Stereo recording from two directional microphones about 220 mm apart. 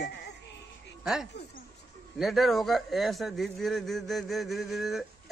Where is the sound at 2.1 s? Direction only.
Centre (ahead or behind).